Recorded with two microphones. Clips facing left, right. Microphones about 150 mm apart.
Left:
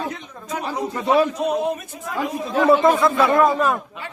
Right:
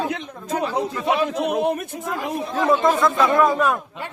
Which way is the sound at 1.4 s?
65° right (ahead or behind).